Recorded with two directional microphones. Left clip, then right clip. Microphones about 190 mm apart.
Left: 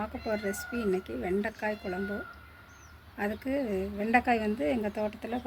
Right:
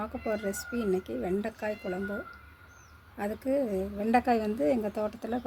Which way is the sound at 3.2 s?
45° right (ahead or behind).